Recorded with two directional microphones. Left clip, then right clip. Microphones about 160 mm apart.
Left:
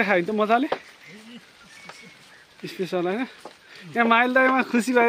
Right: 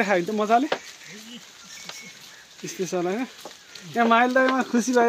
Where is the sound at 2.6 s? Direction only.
5° left (ahead or behind).